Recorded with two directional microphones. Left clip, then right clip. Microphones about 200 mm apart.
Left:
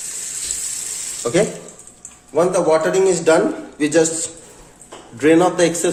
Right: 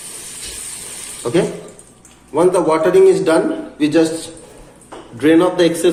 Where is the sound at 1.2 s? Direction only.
35° left (ahead or behind).